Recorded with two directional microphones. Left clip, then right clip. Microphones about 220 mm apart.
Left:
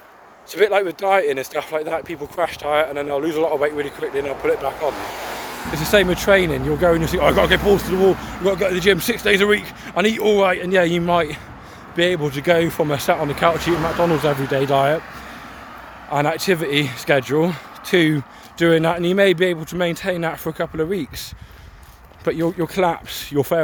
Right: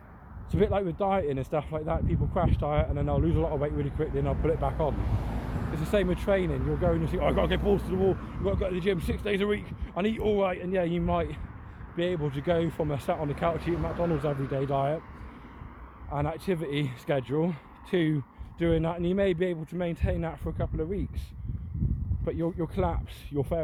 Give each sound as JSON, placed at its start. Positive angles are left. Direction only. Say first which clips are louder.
{"t": 0.5, "sound": "speech", "louder": "left 10 dB", "side_deg": 10}
{"t": 5.7, "sound": "speech", "louder": "left 12 dB", "side_deg": 10}
{"t": 7.9, "sound": "speech", "louder": "left 11 dB", "side_deg": 50}
{"t": 8.4, "sound": "speech", "louder": "left 12 dB", "side_deg": 10}
{"t": 16.0, "sound": "speech", "louder": "left 13 dB", "side_deg": 10}